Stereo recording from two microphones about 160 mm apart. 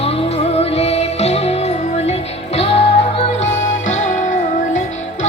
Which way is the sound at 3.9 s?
50° left (ahead or behind).